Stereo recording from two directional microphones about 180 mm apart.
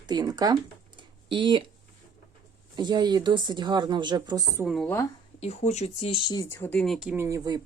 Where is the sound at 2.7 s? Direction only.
25° right (ahead or behind).